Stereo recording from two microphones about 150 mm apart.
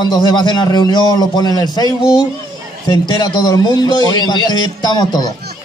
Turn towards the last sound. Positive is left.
turn(degrees=25)  # may be behind; listen again after turning